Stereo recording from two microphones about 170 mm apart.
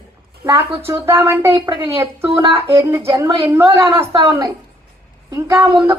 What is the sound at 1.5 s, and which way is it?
Speech, 30° right (ahead or behind).